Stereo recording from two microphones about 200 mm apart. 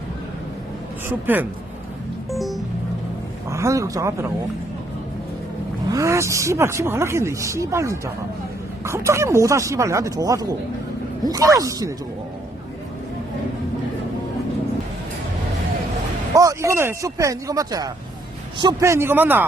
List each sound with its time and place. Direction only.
2.3 s music: centre (ahead or behind)
3.5 s speech: 15° right (ahead or behind)
5.9 s speech: 15° right (ahead or behind)
16.3 s speech: 15° right (ahead or behind)